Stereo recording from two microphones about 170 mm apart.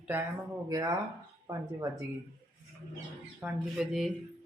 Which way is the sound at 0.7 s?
20° right (ahead or behind).